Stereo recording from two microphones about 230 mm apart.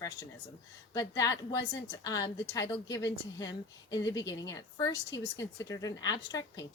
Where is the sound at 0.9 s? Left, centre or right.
Centre.